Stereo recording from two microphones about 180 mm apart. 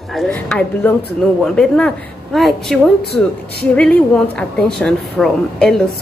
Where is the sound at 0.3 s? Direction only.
10° left (ahead or behind).